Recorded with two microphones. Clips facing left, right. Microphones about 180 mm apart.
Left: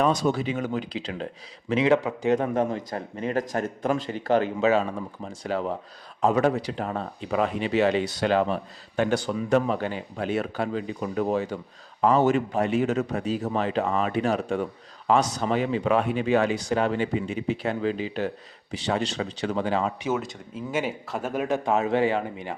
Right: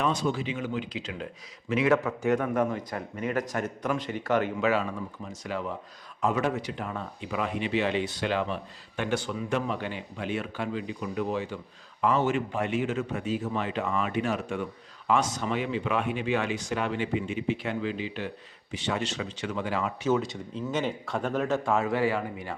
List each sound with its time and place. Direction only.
0.0 s speech: 40° left (ahead or behind)
1.7 s a man's voice: 20° left (ahead or behind)
20.0 s speech: 10° left (ahead or behind)